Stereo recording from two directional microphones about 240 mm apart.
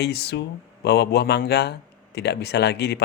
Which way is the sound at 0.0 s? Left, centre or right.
Left.